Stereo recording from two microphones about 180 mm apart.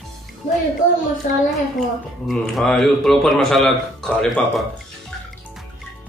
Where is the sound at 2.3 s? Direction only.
Centre (ahead or behind).